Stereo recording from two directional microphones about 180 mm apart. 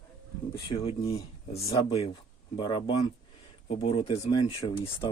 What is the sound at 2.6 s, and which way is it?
Speech, 25° left (ahead or behind).